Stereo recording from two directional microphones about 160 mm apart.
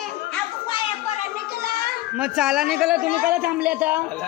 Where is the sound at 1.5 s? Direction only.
75° left (ahead or behind).